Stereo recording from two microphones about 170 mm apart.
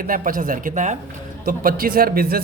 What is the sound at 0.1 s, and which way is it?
Speech, 55° right (ahead or behind).